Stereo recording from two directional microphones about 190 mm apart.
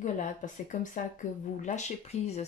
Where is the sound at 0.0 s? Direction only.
40° left (ahead or behind).